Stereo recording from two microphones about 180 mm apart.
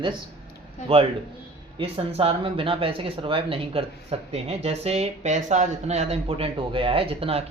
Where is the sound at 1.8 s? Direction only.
30° right (ahead or behind).